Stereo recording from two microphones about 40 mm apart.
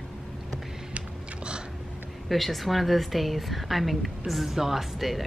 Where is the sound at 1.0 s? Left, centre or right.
Right.